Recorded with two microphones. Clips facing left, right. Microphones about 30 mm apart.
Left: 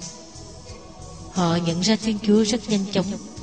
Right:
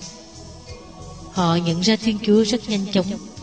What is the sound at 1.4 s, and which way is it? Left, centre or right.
A woman's voice, centre.